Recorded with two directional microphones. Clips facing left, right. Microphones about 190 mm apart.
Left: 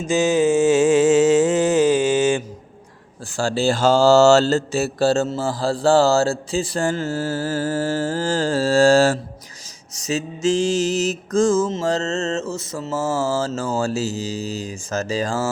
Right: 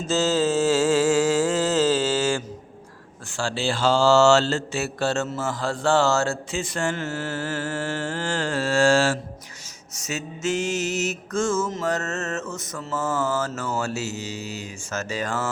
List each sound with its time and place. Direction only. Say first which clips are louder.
0.1 s mantra: left 5 dB; 15° left (ahead or behind)
3.3 s mantra: left 6 dB; 40° left (ahead or behind)